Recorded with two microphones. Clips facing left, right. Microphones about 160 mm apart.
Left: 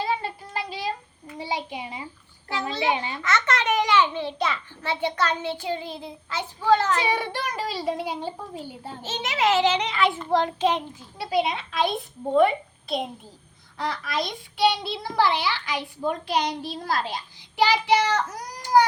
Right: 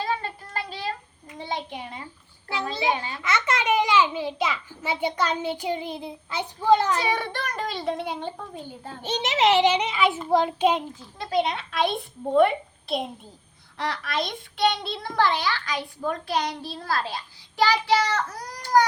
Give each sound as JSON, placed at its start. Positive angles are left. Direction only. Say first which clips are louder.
{"t": 0.0, "sound": "child singing", "louder": "left 1 dB", "side_deg": 10}
{"t": 1.4, "sound": "a child's voice", "louder": "left 1 dB", "side_deg": 10}
{"t": 3.2, "sound": "a child's voice", "louder": "even", "side_deg": -10}
{"t": 7.0, "sound": "a child's voice", "louder": "left 1 dB", "side_deg": 10}
{"t": 9.0, "sound": "a child's voice", "louder": "right 3 dB", "side_deg": -20}
{"t": 11.2, "sound": "a child's voice", "louder": "even", "side_deg": 5}